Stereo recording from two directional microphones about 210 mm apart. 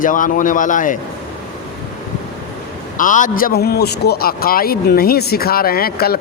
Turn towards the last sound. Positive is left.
turn(degrees=45)  # may be behind; listen again after turning